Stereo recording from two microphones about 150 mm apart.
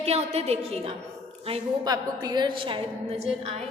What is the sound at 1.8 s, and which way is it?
Speech, 25° right (ahead or behind).